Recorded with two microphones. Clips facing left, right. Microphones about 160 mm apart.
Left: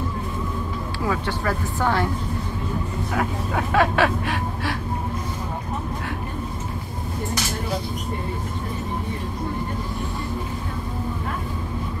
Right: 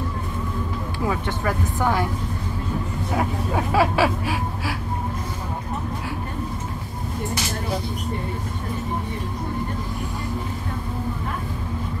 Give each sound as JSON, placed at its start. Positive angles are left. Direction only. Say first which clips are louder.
{"t": 1.0, "sound": "speech", "louder": "even", "side_deg": -20}
{"t": 3.7, "sound": "speech", "louder": "left 1 dB", "side_deg": -5}